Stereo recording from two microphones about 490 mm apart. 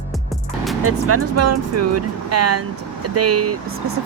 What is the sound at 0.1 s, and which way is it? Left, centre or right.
Music, centre.